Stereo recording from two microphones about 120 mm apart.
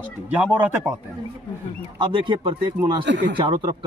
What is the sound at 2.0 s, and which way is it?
Speech, 40° right (ahead or behind).